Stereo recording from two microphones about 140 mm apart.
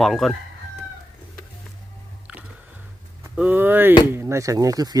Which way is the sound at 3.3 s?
10° right (ahead or behind).